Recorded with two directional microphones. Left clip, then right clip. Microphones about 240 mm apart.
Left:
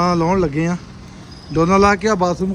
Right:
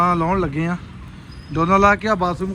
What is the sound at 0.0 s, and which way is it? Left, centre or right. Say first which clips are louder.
A man's voice: left 1 dB; centre.